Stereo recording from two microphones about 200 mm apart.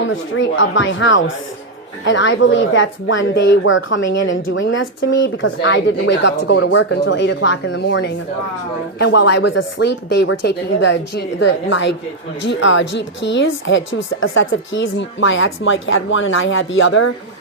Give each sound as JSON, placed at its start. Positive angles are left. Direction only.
{"t": 0.3, "sound": "speech", "side_deg": 75}